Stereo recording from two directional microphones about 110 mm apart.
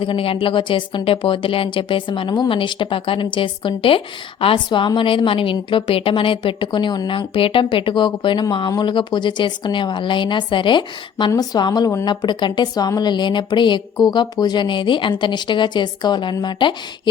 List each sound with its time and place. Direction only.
0.0 s speech: 55° left (ahead or behind)